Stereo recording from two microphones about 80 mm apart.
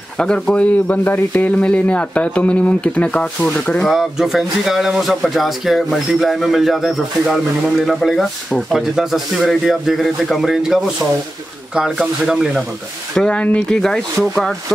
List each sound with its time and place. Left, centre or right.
0.2 s speech: centre
3.8 s speech: centre
13.1 s speech: centre